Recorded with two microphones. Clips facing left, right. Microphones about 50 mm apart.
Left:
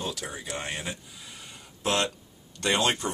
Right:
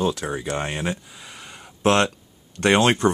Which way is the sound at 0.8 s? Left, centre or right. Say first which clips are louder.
Right 9 dB; right.